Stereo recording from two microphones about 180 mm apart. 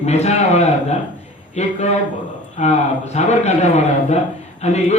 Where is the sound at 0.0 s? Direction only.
35° left (ahead or behind).